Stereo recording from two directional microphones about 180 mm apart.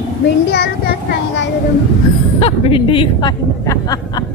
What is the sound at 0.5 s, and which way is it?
Speech, 60° left (ahead or behind).